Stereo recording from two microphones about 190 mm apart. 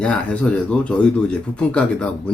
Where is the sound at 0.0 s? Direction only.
5° left (ahead or behind).